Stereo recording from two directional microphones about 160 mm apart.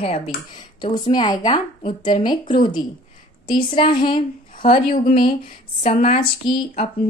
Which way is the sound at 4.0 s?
30° left (ahead or behind).